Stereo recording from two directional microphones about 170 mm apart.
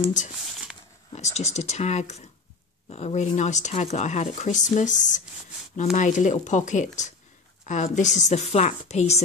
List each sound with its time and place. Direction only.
1.1 s a woman's voice: 40° left (ahead or behind)